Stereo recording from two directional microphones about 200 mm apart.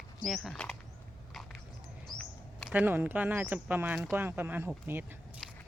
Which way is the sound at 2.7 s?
10° right (ahead or behind).